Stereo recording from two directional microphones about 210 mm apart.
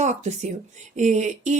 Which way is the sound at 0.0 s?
35° right (ahead or behind).